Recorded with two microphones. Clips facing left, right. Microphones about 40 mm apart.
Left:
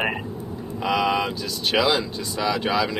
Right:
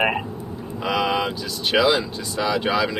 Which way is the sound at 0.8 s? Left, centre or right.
Centre.